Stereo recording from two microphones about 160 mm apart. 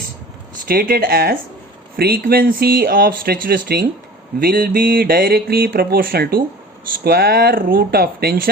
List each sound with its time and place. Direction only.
0.7 s mantra: 65° right (ahead or behind)
2.0 s speech: 70° right (ahead or behind)
4.4 s mantra: 65° right (ahead or behind)